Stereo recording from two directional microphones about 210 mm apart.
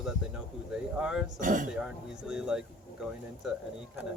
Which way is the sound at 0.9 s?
5° right (ahead or behind).